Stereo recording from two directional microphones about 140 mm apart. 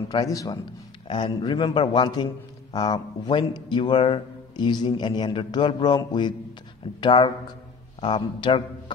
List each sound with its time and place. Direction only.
0.1 s a man's voice: 25° left (ahead or behind)